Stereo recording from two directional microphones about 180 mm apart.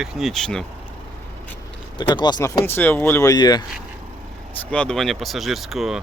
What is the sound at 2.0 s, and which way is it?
Speech, 25° left (ahead or behind).